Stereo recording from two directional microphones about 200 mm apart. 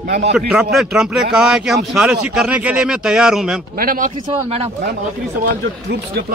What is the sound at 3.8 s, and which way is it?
Speech, 45° right (ahead or behind).